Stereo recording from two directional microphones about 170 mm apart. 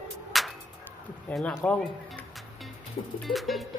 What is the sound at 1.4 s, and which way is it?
Speech, 10° left (ahead or behind).